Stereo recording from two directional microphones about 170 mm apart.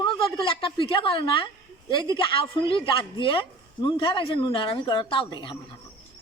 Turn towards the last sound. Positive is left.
turn(degrees=30)  # may be behind; listen again after turning